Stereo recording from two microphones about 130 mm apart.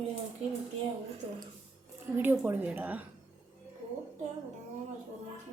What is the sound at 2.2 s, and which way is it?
Speech, 15° right (ahead or behind).